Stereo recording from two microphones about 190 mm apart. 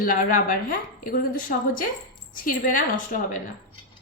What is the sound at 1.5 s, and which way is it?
Speech, 50° left (ahead or behind).